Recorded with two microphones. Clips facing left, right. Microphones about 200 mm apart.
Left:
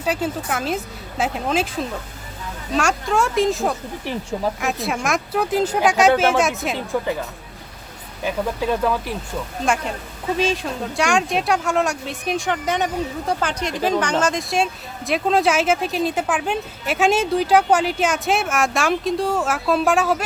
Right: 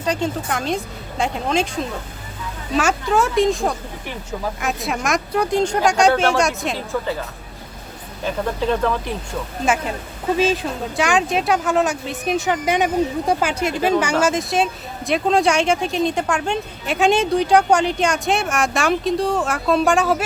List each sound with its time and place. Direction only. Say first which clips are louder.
0.0 s speech: right 1 dB; 5° left (ahead or behind)
6.9 s speech: left 2 dB; 15° left (ahead or behind)
8.2 s speech: right 1 dB; 10° left (ahead or behind)
9.6 s speech: right 2 dB; 5° right (ahead or behind)